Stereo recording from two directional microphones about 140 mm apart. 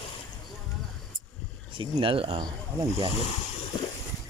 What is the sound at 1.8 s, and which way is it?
Speech, 40° right (ahead or behind).